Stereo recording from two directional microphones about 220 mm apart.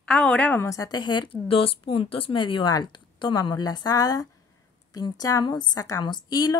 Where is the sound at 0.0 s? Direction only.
5° left (ahead or behind).